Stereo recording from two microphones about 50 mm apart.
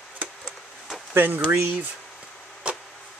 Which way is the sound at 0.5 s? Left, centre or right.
Centre.